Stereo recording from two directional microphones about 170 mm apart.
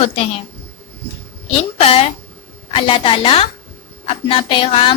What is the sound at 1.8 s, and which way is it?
A woman's voice, 35° left (ahead or behind).